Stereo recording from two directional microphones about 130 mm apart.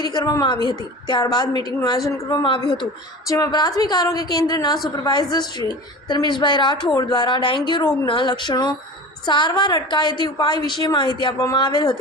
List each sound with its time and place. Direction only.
0.0 s a woman's voice: 30° left (ahead or behind)